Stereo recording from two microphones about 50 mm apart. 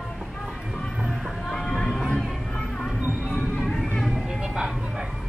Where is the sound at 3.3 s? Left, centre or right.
Centre.